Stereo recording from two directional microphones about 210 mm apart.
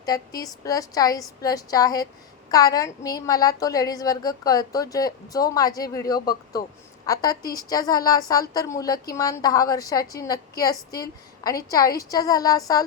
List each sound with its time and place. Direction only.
0.0 s a woman's voice: 15° left (ahead or behind)
11.9 s a woman's voice: 15° left (ahead or behind)